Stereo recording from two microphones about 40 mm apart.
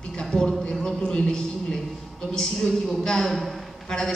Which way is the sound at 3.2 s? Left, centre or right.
Centre.